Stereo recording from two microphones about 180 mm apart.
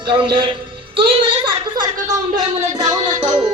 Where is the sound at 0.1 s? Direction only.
30° right (ahead or behind).